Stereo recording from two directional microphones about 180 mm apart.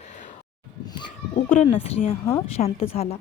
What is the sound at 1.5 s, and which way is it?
Speech, 35° left (ahead or behind).